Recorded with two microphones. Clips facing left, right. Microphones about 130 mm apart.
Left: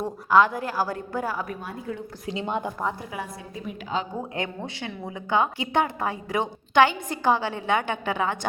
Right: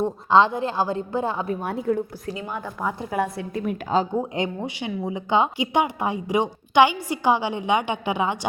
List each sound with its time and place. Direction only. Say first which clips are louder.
0.0 s a woman's voice: right 2 dB; 25° right (ahead or behind)
1.6 s a woman's voice: right 9 dB; 55° right (ahead or behind)
2.4 s speech: left 7 dB; 20° left (ahead or behind)
3.3 s a woman's voice: right 8 dB; 60° right (ahead or behind)
4.2 s speech: right 5 dB; 20° right (ahead or behind)